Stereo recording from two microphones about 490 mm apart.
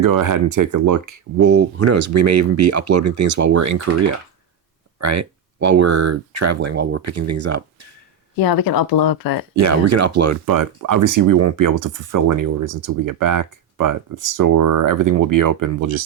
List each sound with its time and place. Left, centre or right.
0.0 s speech: right
1.5 s speech: right
8.4 s speech: left
9.6 s speech: right